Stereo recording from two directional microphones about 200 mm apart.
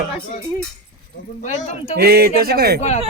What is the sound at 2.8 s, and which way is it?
Speech, 30° left (ahead or behind).